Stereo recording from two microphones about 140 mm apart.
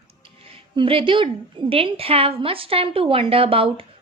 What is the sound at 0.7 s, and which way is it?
A woman's voice, 40° right (ahead or behind).